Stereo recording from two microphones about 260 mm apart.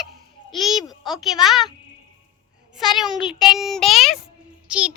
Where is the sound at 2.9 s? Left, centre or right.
Centre.